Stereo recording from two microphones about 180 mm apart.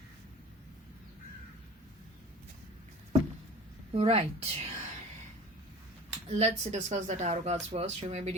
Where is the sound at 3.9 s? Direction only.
35° right (ahead or behind).